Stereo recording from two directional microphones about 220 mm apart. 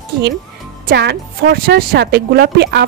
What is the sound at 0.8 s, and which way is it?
Speech, 50° right (ahead or behind).